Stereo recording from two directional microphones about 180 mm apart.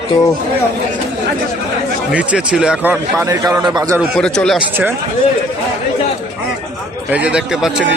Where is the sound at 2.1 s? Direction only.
5° right (ahead or behind).